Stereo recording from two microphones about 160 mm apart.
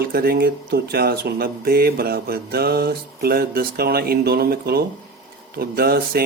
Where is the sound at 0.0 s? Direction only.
75° right (ahead or behind).